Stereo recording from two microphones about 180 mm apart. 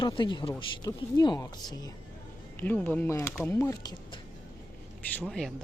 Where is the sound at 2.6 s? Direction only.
10° left (ahead or behind).